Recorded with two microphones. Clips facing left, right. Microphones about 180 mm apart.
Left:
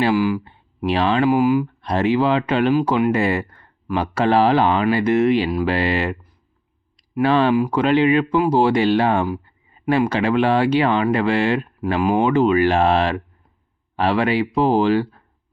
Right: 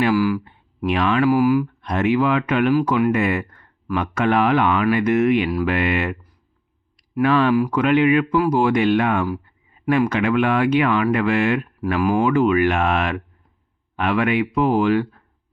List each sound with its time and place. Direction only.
0.0 s speech: 25° left (ahead or behind)
7.2 s speech: 30° left (ahead or behind)